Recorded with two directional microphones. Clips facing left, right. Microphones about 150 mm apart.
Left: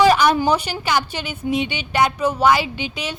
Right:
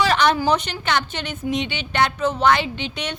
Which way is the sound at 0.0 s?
10° left (ahead or behind).